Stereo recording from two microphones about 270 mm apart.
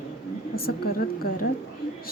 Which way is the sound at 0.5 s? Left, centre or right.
Left.